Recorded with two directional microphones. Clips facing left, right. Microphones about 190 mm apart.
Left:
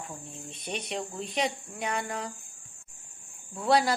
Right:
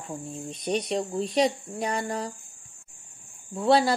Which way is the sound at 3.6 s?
25° right (ahead or behind).